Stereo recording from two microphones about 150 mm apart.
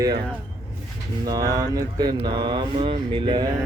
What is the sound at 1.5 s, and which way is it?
Speech, 25° right (ahead or behind).